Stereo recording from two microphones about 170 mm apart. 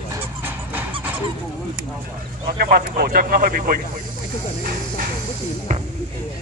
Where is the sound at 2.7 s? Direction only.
60° right (ahead or behind).